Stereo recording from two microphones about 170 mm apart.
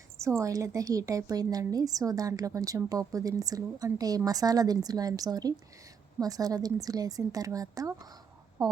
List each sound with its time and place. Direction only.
0.2 s a woman's voice: 15° right (ahead or behind)